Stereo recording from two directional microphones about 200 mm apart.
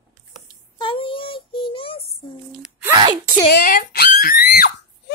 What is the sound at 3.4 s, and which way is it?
Screaming, 45° left (ahead or behind).